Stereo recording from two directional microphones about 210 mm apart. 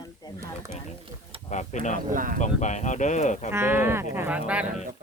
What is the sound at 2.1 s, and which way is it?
Speech, 40° right (ahead or behind).